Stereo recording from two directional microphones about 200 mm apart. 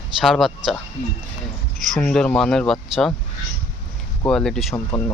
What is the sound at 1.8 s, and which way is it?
Speech, 5° left (ahead or behind).